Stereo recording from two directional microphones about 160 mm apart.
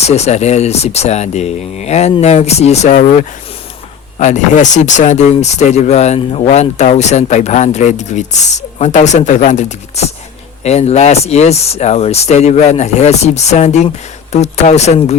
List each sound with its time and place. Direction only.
0.0 s speech: 45° left (ahead or behind)